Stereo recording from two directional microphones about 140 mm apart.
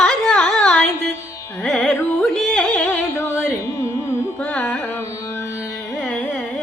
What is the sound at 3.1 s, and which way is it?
Carnatic music, 20° left (ahead or behind).